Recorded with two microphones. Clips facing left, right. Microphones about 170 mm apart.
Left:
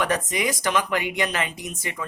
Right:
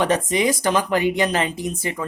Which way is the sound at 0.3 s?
30° right (ahead or behind).